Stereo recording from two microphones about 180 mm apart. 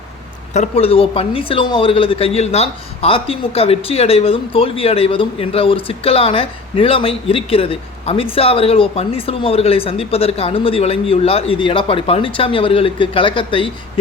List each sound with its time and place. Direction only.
0.5 s speech: 35° left (ahead or behind)